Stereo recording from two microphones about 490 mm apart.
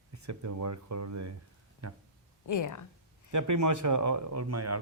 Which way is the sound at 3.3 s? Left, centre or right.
Right.